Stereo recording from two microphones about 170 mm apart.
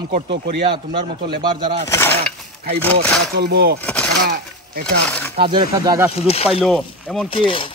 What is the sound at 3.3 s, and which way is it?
Speech, 75° right (ahead or behind).